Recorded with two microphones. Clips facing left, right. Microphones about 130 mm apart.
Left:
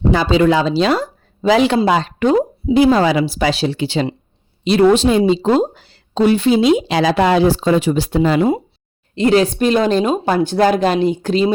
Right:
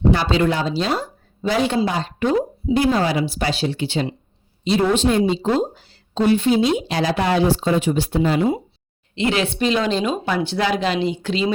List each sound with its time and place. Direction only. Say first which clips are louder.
0.6 s speech: left 6 dB; 90° left
4.6 s a woman's voice: left 7 dB; 75° left (ahead or behind)
5.1 s speech: left 5 dB; 90° left; by 8.6 s 65° left (ahead or behind)
9.1 s a woman's voice: left 7 dB; 40° left (ahead or behind)